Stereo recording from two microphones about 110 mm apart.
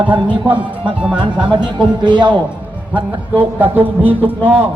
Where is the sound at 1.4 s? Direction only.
45° right (ahead or behind).